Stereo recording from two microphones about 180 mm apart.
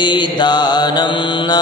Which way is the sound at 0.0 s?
25° left (ahead or behind).